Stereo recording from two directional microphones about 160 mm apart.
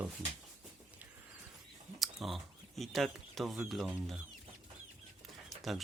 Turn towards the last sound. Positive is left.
turn(degrees=0)  # may be behind; listen again after turning